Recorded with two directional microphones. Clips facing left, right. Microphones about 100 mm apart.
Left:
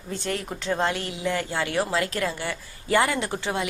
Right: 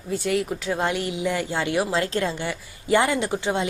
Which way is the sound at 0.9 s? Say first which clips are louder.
Right 2 dB; 15° right (ahead or behind).